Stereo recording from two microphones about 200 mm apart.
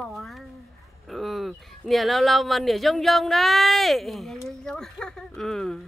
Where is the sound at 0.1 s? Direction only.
Centre (ahead or behind).